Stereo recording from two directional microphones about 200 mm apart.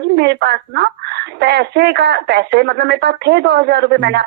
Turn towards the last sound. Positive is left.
turn(degrees=-55)  # may be behind; listen again after turning